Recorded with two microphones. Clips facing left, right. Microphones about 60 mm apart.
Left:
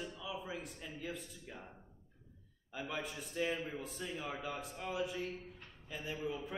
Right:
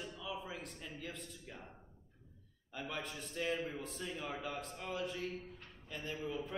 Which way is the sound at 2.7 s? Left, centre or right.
Centre.